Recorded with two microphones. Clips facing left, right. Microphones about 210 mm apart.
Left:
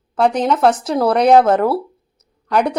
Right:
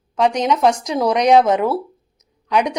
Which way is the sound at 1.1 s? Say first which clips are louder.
Left 2 dB; 15° right (ahead or behind).